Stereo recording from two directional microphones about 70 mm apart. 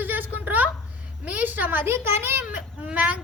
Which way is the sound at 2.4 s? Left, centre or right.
Centre.